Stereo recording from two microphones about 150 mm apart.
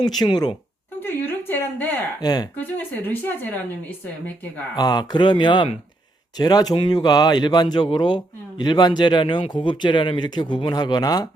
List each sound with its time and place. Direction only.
0.0 s speech: 25° left (ahead or behind)
0.9 s a sound: 15° left (ahead or behind)
2.2 s speech: 25° left (ahead or behind)
2.6 s a woman's voice: 10° left (ahead or behind)
4.8 s speech: 30° left (ahead or behind)